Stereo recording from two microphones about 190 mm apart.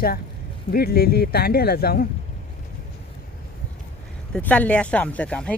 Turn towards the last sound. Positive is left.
turn(degrees=5)  # may be behind; listen again after turning